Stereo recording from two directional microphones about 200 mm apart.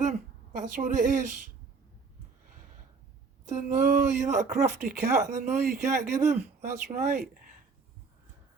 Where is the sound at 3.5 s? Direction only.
40° right (ahead or behind).